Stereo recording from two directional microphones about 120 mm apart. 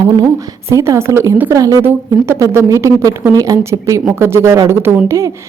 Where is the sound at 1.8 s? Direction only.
15° right (ahead or behind).